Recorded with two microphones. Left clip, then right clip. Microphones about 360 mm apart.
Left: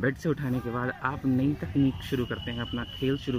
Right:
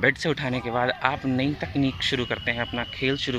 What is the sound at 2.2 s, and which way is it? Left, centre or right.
Speech, centre.